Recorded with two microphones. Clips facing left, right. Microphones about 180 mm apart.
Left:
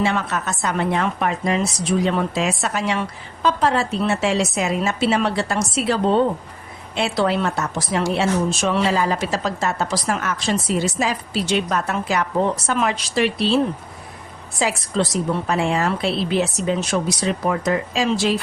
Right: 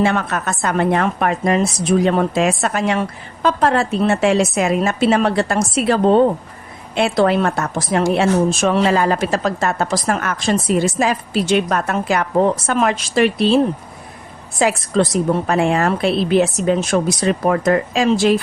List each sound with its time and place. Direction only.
0.0 s a woman's voice: 55° right (ahead or behind)
14.6 s a woman's voice: 50° right (ahead or behind)